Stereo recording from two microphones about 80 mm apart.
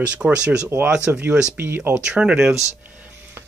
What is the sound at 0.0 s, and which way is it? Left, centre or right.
Speech, centre.